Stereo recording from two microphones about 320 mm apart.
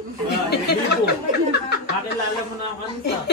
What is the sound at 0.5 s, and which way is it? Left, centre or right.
Speech, left.